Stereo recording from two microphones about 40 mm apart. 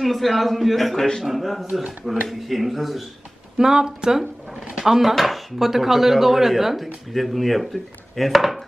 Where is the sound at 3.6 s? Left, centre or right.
Centre.